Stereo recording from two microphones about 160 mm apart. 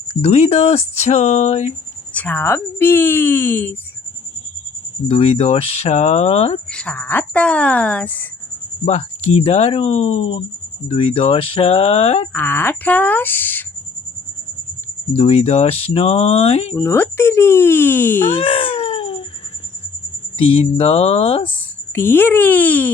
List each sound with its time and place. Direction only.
0.1 s speech: 40° left (ahead or behind)
2.1 s speech: 10° left (ahead or behind)
5.0 s speech: 35° left (ahead or behind)
6.7 s speech: 5° left (ahead or behind)
8.8 s speech: 40° left (ahead or behind)
12.3 s speech: 10° left (ahead or behind)
15.1 s speech: 40° left (ahead or behind)
16.7 s speech: 15° left (ahead or behind)
18.3 s speech: 35° left (ahead or behind)
20.4 s speech: 35° left (ahead or behind)
21.5 s speech: 10° left (ahead or behind)